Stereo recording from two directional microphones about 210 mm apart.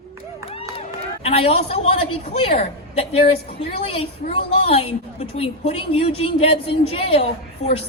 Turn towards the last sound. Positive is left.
turn(degrees=30)  # may be behind; listen again after turning